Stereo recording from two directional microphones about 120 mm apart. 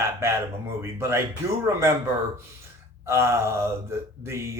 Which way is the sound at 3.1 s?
20° right (ahead or behind).